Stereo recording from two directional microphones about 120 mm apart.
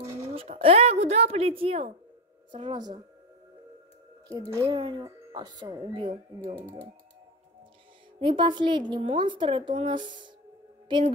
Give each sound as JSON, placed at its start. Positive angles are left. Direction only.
{"t": 0.3, "sound": "a woman's voice", "side_deg": -55}
{"t": 2.5, "sound": "speech", "side_deg": -40}
{"t": 4.3, "sound": "a woman's voice", "side_deg": -25}
{"t": 4.6, "sound": "speech", "side_deg": -40}
{"t": 8.2, "sound": "speech", "side_deg": -45}